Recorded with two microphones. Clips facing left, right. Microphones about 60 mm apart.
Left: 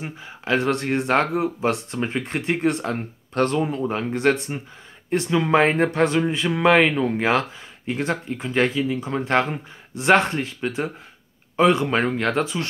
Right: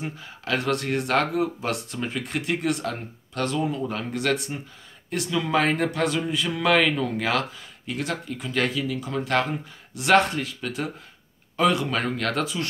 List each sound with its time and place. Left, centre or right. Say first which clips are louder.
0.0 s speech: left 1 dB; left
3.8 s speech: left 6 dB; left